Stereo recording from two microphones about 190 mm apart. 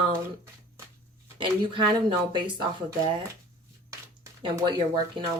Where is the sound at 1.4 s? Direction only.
25° right (ahead or behind).